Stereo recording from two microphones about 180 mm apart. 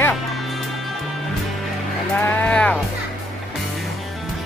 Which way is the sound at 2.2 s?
5° left (ahead or behind).